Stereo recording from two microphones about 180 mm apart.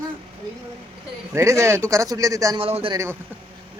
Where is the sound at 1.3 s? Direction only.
15° right (ahead or behind).